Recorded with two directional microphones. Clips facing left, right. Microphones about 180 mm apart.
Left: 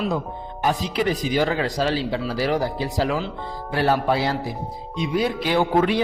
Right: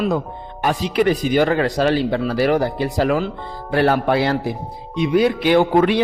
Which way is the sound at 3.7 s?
65° right (ahead or behind).